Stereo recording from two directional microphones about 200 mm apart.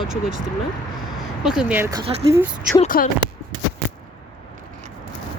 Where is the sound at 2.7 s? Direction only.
40° left (ahead or behind).